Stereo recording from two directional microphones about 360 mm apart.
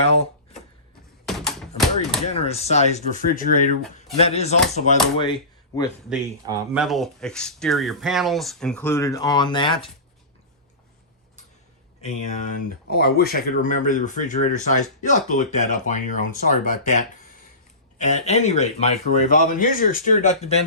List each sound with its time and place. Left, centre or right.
0.0 s a sound: centre
1.3 s typewriter: centre
2.3 s speech: centre
6.1 s speech: centre
12.0 s speech: centre